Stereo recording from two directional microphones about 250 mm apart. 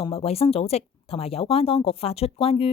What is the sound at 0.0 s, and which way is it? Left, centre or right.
Speech, left.